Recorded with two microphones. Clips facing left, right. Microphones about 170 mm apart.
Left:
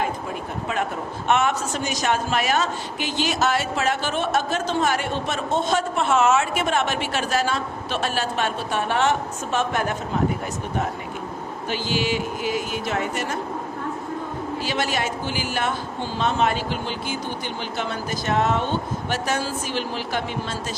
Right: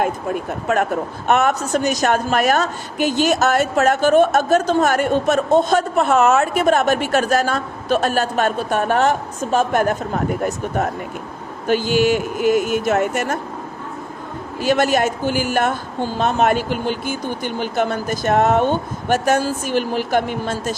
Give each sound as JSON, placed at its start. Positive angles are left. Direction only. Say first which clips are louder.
{"t": 1.3, "sound": "a woman's voice", "louder": "right 5 dB", "side_deg": -40}
{"t": 11.7, "sound": "a woman's voice", "louder": "right 9 dB", "side_deg": -50}
{"t": 14.6, "sound": "a woman's voice", "louder": "right 10 dB", "side_deg": -50}